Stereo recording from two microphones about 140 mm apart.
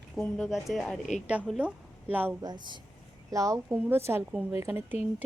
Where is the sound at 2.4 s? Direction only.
30° right (ahead or behind).